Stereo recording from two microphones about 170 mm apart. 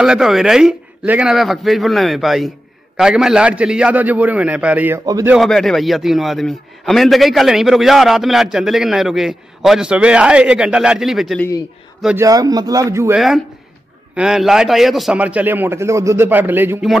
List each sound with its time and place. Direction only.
0.0 s a man's voice: 5° right (ahead or behind)
5.0 s a man's voice: 20° right (ahead or behind)
5.3 s a man's voice: centre (ahead or behind)
12.2 s a man's voice: 20° right (ahead or behind)
14.1 s a man's voice: 5° right (ahead or behind)